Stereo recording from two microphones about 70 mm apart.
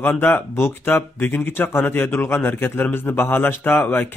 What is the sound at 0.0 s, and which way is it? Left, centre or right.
Speech, left.